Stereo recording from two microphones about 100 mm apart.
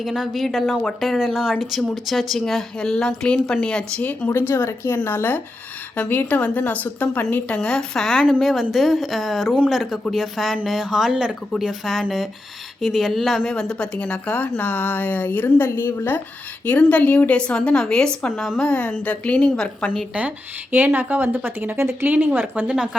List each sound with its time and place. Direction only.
0.0 s a woman's voice: centre (ahead or behind)
4.3 s a woman's voice: 25° left (ahead or behind)
20.1 s speech: 15° right (ahead or behind)